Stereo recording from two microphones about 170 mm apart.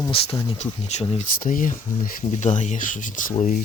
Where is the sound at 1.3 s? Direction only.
55° left (ahead or behind).